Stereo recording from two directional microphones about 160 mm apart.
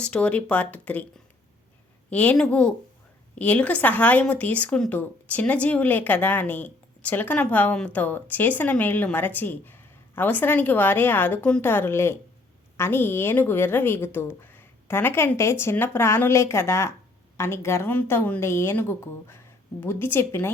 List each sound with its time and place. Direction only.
0.0 s speech: 5° left (ahead or behind)
2.0 s speech: 10° left (ahead or behind)